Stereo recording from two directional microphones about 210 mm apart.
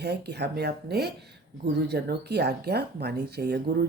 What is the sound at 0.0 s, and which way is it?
Speech, 50° right (ahead or behind).